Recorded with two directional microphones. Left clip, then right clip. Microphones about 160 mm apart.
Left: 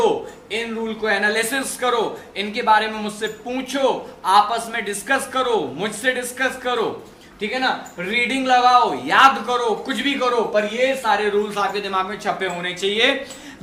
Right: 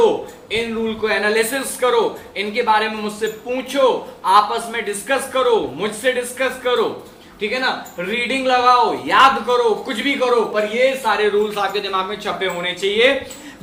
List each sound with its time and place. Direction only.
0.5 s a man's voice: 50° left (ahead or behind)
7.9 s a man's voice: 50° left (ahead or behind)